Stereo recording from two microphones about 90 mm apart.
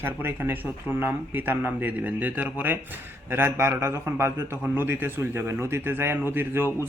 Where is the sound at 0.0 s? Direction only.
25° right (ahead or behind).